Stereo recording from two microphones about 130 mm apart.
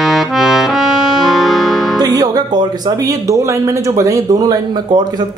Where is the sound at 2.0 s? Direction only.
30° right (ahead or behind).